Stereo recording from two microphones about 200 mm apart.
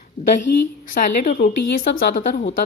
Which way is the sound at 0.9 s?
40° left (ahead or behind).